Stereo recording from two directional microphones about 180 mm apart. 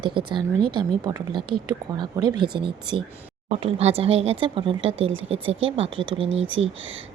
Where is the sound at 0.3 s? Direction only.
25° right (ahead or behind).